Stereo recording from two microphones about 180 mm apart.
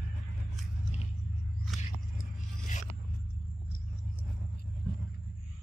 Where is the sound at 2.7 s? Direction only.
45° left (ahead or behind).